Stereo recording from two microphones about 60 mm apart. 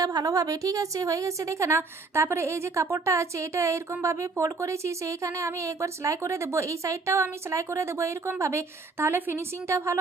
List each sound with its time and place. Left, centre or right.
0.0 s a woman's voice: right